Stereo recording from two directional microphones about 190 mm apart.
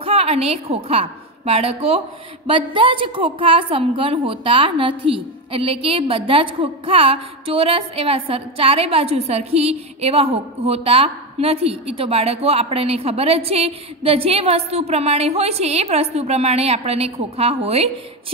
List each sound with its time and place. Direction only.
0.0 s a woman's voice: 30° right (ahead or behind)